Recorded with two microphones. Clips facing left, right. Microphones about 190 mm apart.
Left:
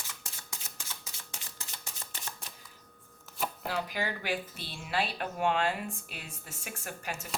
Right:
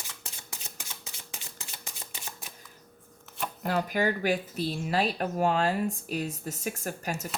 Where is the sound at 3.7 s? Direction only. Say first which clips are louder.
Right 9 dB; 50° right (ahead or behind).